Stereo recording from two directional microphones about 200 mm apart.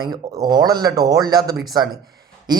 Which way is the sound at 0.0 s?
20° right (ahead or behind).